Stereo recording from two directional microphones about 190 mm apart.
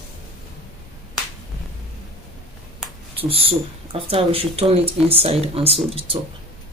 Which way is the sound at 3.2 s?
30° right (ahead or behind).